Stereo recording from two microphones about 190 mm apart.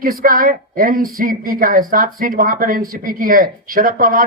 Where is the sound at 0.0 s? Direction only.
50° right (ahead or behind).